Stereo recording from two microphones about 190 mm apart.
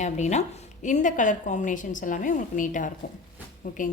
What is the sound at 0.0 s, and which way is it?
A woman's voice, 35° left (ahead or behind).